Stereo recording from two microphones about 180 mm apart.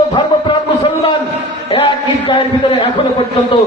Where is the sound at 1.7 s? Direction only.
30° left (ahead or behind).